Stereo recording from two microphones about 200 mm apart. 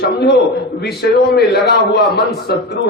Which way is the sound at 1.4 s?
55° left (ahead or behind).